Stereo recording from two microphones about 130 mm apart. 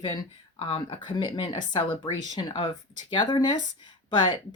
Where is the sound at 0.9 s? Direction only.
40° left (ahead or behind).